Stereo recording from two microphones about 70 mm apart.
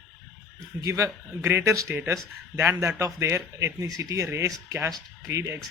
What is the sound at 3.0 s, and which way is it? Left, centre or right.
Speech, right.